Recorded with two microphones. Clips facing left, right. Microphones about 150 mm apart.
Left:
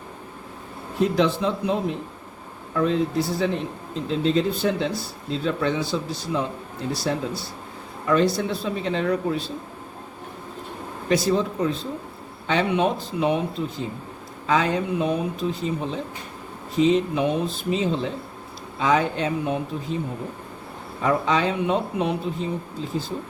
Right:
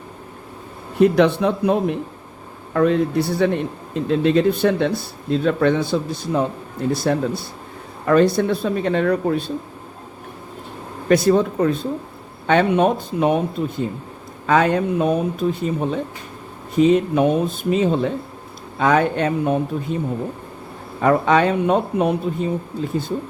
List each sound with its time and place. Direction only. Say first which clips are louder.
0.9 s speech: right 6 dB; 60° right (ahead or behind)
11.1 s speech: right 6 dB; 55° right (ahead or behind)
21.0 s speech: right 6 dB; 55° right (ahead or behind)